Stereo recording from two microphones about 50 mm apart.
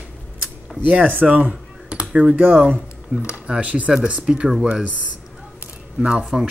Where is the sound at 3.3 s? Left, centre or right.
Right.